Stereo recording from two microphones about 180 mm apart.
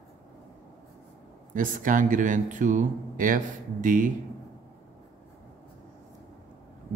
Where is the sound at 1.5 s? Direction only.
45° right (ahead or behind).